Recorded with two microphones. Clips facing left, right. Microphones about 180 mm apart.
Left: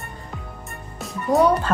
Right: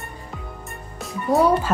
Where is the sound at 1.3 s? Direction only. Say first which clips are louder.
Even; 5° right (ahead or behind).